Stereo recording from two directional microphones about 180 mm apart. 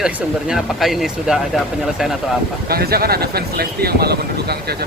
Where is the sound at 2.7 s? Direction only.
60° right (ahead or behind).